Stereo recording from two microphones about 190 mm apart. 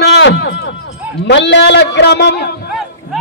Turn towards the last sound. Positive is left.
turn(degrees=0)  # may be behind; listen again after turning